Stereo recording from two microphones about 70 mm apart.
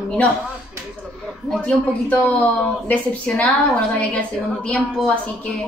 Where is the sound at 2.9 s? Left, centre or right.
Left.